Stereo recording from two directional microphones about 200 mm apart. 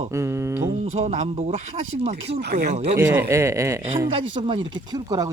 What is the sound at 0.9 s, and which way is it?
Speech, 35° right (ahead or behind).